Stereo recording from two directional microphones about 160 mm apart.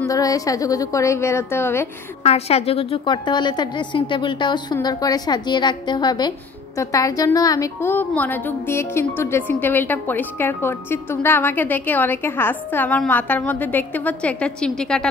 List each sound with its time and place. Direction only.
0.1 s a woman's voice: 20° left (ahead or behind)
2.2 s a woman's voice: 40° left (ahead or behind); by 15.0 s 5° left (ahead or behind)